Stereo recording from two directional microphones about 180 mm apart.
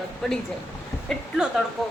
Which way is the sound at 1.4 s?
Centre (ahead or behind).